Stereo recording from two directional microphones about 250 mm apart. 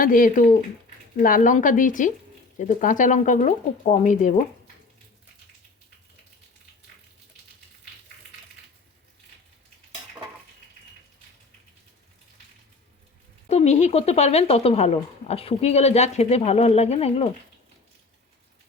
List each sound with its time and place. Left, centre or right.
0.0 s speech: left
13.5 s speech: left